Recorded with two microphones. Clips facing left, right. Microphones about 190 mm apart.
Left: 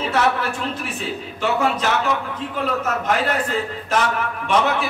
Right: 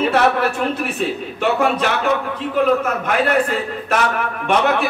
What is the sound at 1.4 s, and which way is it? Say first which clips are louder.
A man's voice: right 3 dB; 60° right (ahead or behind).